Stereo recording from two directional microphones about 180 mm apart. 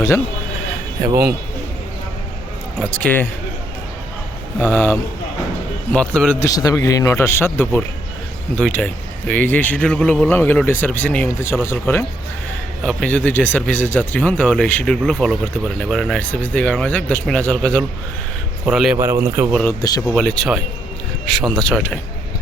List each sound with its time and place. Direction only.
1.0 s speech: 15° right (ahead or behind)
2.9 s speech: 10° left (ahead or behind)
4.6 s speech: 10° left (ahead or behind)
6.4 s speech: 20° left (ahead or behind); by 18.9 s centre (ahead or behind)
18.9 s speech: 15° right (ahead or behind)
19.6 s speech: 20° left (ahead or behind)
20.1 s speech: 5° left (ahead or behind)
21.6 s speech: 5° left (ahead or behind)